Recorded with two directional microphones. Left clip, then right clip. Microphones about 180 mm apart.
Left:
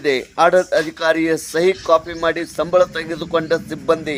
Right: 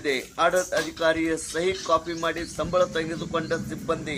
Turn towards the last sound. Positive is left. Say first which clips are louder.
# left 10 dB
turn(degrees=45)  # may be behind; listen again after turning